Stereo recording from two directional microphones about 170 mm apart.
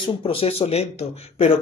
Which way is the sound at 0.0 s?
35° left (ahead or behind).